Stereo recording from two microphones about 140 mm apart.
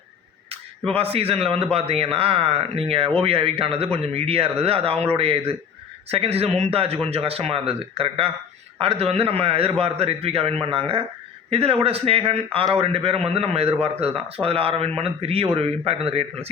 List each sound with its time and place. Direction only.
0.9 s a man's voice: 45° right (ahead or behind)